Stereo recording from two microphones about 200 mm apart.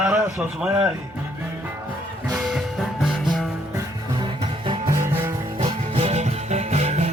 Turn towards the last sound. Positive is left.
turn(degrees=-35)  # may be behind; listen again after turning